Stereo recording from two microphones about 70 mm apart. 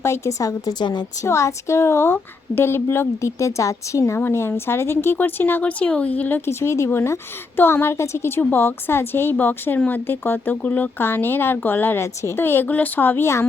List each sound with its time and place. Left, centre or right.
0.0 s a woman's voice: left
0.7 s a woman's voice: left
1.2 s a woman's voice: left
6.4 s a woman's voice: left
8.4 s a woman's voice: left